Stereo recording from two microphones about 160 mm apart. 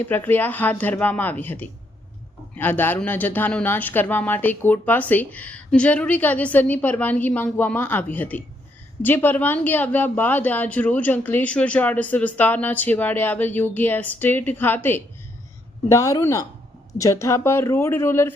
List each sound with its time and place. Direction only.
0.0 s speech: 10° left (ahead or behind)